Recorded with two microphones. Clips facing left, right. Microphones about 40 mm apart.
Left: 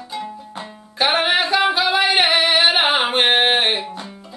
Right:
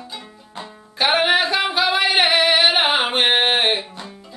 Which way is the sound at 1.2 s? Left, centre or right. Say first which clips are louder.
Left 1 dB; centre.